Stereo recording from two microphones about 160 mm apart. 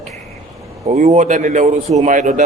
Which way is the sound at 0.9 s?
45° right (ahead or behind).